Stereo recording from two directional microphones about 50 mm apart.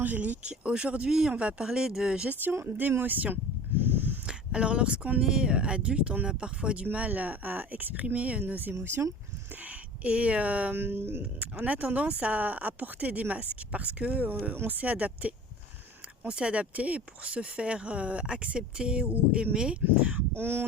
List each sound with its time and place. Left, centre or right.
0.0 s speech: right
0.4 s speech: right
1.6 s speech: centre
2.4 s speech: right
3.0 s speech: right
3.8 s a sound: right
4.3 s a sound: centre
5.2 s speech: centre
10.8 s music: right
11.6 s speech: right
14.5 s music: right
14.8 s speech: right
16.2 s speech: centre
20.3 s music: right